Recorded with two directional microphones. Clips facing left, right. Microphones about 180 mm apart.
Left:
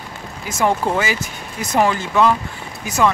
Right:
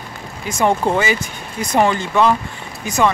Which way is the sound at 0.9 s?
5° left (ahead or behind).